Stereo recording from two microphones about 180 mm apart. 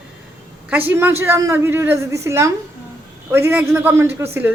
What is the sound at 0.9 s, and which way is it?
A man's voice, 10° right (ahead or behind).